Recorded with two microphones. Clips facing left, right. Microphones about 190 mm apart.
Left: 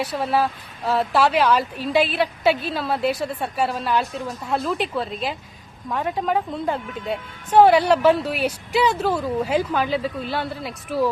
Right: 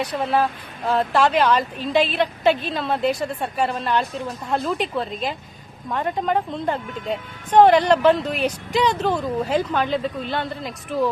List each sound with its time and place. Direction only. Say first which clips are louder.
0.0 s speech: right 1 dB; 5° left (ahead or behind)